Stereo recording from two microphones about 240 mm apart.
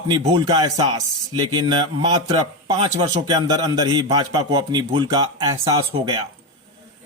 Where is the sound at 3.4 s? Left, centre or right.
Centre.